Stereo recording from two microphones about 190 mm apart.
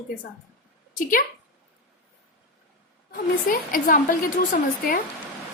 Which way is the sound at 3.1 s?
45° left (ahead or behind).